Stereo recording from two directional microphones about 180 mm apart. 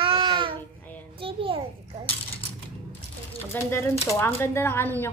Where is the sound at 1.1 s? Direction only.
30° right (ahead or behind).